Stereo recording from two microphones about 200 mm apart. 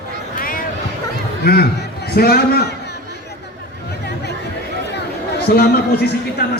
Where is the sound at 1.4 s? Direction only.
50° left (ahead or behind).